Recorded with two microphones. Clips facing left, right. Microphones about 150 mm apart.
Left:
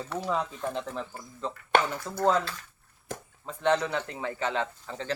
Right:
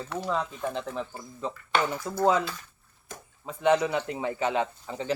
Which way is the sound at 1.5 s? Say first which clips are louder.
Left 2 dB; 60° left (ahead or behind).